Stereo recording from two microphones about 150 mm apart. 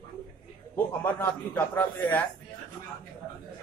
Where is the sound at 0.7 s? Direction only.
10° left (ahead or behind).